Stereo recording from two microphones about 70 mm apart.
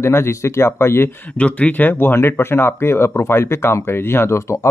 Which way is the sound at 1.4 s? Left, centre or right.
Centre.